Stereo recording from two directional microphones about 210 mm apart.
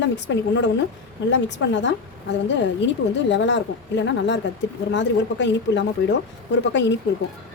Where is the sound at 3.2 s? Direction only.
60° left (ahead or behind).